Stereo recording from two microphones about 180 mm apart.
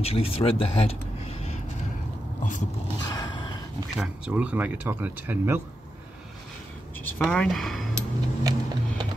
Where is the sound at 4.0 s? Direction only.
5° right (ahead or behind).